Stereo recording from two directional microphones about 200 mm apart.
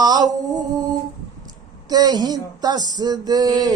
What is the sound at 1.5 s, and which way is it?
Speech, 20° right (ahead or behind).